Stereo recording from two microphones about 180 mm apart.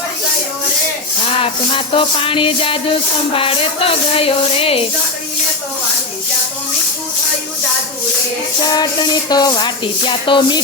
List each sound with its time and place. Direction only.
1.4 s music: 30° left (ahead or behind)
8.6 s music: 25° left (ahead or behind)